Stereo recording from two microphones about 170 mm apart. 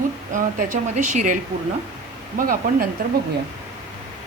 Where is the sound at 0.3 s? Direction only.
50° right (ahead or behind).